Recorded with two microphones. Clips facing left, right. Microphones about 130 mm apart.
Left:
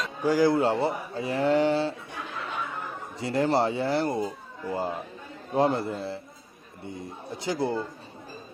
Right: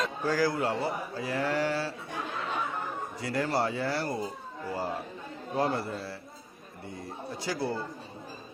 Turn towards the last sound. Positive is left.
turn(degrees=20)  # may be behind; listen again after turning